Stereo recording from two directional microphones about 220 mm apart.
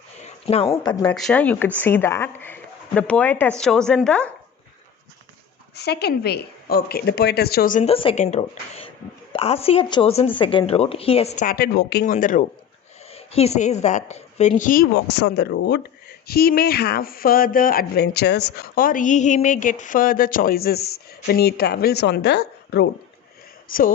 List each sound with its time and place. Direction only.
0.2 s a sound: 30° left (ahead or behind)
0.7 s speech: 20° left (ahead or behind)
1.1 s speech: 5° left (ahead or behind)
5.7 s a woman's voice: 45° left (ahead or behind)
15.1 s speech: 50° left (ahead or behind)